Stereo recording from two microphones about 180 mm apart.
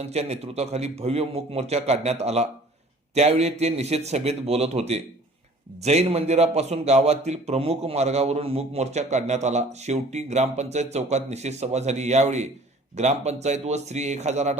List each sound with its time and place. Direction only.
0.0 s a man's voice: 35° right (ahead or behind)